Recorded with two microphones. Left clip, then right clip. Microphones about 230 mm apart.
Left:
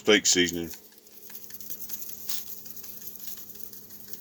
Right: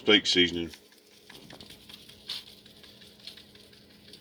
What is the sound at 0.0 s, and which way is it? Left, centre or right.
Speech, left.